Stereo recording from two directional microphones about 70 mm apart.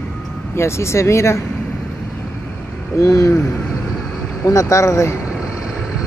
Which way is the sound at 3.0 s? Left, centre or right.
Left.